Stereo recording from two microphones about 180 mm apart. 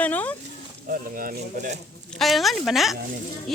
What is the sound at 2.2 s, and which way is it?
Speech, centre (ahead or behind).